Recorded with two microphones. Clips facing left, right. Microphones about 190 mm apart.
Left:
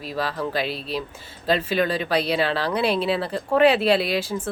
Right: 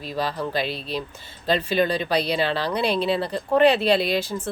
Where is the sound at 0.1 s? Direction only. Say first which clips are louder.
Even; 5° left (ahead or behind).